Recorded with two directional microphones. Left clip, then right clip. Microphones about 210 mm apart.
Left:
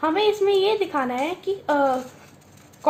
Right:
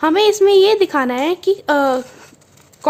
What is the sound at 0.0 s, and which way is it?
A woman's voice, 45° right (ahead or behind).